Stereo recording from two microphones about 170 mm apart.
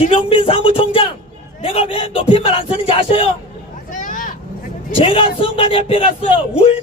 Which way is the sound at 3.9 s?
50° left (ahead or behind).